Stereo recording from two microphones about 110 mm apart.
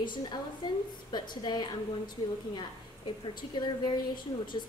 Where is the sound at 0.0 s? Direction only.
45° left (ahead or behind).